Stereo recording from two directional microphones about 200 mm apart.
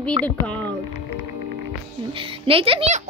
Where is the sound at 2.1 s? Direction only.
25° right (ahead or behind).